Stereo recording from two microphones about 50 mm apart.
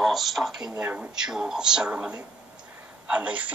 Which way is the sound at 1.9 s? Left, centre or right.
Right.